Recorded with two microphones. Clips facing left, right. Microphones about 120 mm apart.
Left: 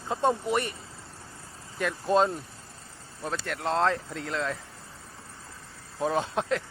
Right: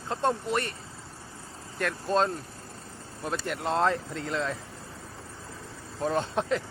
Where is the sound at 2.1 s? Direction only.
10° left (ahead or behind).